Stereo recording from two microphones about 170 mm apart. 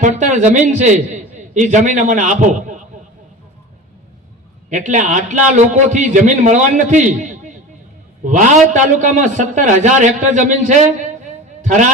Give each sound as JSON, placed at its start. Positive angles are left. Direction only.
{"t": 0.0, "sound": "a man's voice", "side_deg": -45}
{"t": 4.7, "sound": "a man's voice", "side_deg": -45}